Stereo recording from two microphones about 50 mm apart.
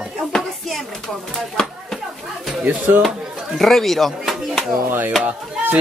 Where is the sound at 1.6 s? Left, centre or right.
Centre.